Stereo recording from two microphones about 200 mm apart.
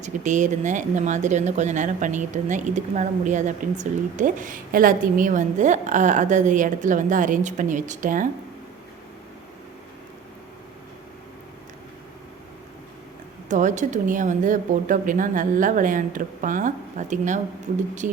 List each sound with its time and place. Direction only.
0.0 s speech: 40° right (ahead or behind)
13.5 s speech: 40° right (ahead or behind)